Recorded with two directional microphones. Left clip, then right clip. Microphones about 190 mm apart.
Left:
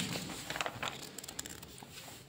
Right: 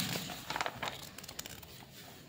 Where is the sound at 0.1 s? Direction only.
10° left (ahead or behind).